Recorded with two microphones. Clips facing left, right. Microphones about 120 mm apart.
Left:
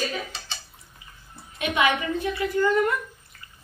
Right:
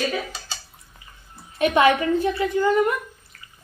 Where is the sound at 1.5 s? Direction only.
40° right (ahead or behind).